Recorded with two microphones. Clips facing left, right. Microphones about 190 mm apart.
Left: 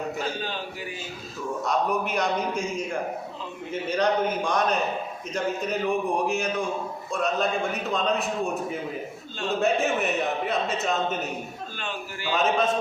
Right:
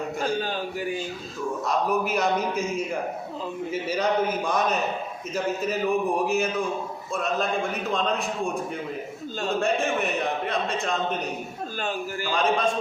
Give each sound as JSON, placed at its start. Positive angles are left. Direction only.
{"t": 1.6, "sound": "a man's voice", "side_deg": -5}
{"t": 11.8, "sound": "a man's voice", "side_deg": -40}
{"t": 12.3, "sound": "a man's voice", "side_deg": 5}